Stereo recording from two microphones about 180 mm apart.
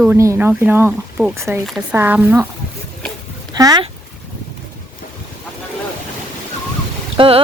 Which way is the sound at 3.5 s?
20° right (ahead or behind).